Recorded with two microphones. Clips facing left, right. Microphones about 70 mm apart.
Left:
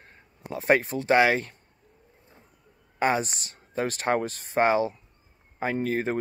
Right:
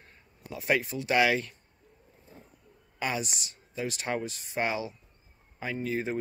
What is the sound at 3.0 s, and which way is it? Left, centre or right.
Speech, left.